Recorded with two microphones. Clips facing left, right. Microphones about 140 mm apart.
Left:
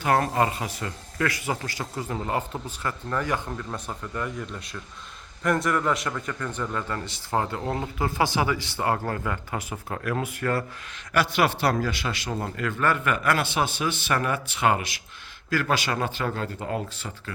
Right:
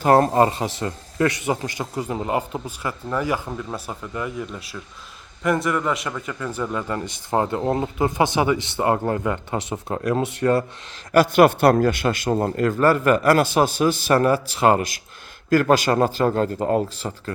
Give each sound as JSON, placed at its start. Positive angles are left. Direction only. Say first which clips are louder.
{"t": 0.0, "sound": "a man's voice", "louder": "right 7 dB", "side_deg": -35}
{"t": 11.1, "sound": "a man's voice", "louder": "right 9 dB", "side_deg": -45}